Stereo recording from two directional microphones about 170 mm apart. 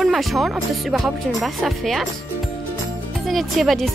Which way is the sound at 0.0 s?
Centre (ahead or behind).